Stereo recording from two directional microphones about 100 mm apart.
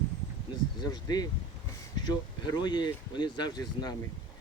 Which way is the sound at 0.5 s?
45° left (ahead or behind).